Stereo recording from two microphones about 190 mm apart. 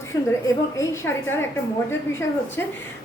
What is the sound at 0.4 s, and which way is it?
A woman's voice, 15° left (ahead or behind).